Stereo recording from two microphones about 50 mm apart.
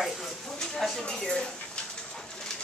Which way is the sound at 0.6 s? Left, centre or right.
Centre.